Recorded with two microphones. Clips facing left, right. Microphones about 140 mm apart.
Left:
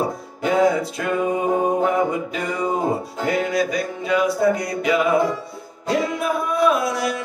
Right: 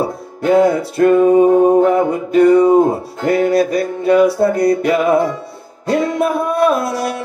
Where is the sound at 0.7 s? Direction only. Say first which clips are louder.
Right 8 dB; 55° right (ahead or behind).